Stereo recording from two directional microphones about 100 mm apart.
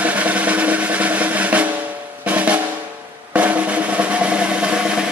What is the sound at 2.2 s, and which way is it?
Drum, 15° right (ahead or behind).